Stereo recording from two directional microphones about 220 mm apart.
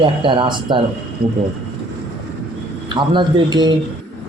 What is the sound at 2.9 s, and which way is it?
Speech, 20° right (ahead or behind).